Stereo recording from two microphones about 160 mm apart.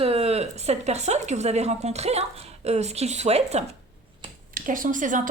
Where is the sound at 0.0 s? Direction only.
40° right (ahead or behind).